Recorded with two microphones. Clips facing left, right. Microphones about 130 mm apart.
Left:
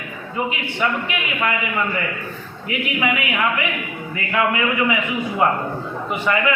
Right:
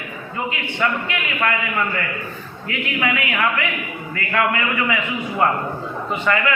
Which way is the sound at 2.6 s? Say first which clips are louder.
Left 1 dB; 15° left (ahead or behind).